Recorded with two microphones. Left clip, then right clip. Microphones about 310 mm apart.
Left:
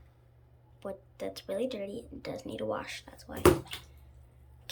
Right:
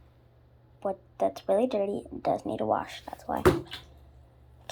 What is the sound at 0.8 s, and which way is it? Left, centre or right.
Speech, centre.